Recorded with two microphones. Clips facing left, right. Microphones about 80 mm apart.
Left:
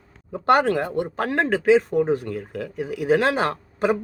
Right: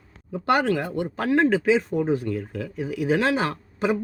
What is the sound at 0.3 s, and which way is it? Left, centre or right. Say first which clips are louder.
Speech: left 3 dB; left.